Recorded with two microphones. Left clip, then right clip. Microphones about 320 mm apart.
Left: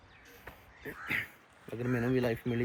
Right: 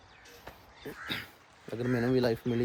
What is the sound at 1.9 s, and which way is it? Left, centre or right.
Speech, centre.